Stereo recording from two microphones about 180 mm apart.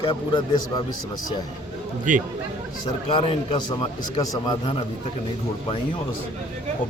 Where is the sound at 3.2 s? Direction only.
30° left (ahead or behind).